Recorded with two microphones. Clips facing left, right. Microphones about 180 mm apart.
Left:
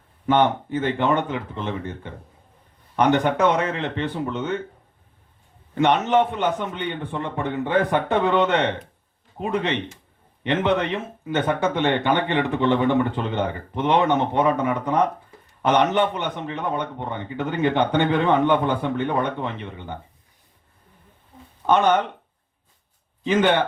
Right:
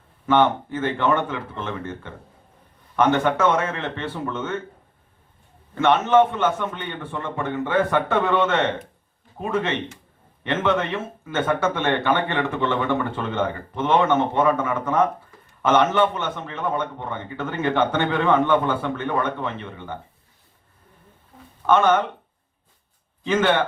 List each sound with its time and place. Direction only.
0.3 s speech: 15° left (ahead or behind)
5.7 s speech: 15° left (ahead or behind)
21.7 s speech: 15° left (ahead or behind)
23.2 s speech: 15° left (ahead or behind)